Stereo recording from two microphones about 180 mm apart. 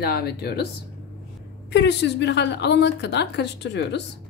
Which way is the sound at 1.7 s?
75° left (ahead or behind).